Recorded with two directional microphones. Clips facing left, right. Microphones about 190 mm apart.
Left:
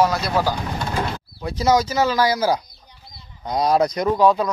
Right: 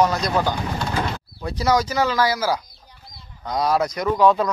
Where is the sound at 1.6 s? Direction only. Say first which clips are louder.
Left 2 dB; 20° left (ahead or behind).